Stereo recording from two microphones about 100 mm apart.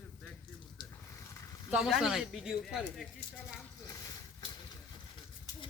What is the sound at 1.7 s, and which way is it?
Speech, 5° right (ahead or behind).